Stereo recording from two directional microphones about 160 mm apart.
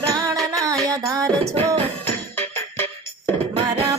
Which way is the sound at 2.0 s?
10° left (ahead or behind).